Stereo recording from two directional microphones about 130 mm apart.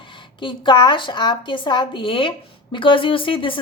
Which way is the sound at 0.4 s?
40° left (ahead or behind).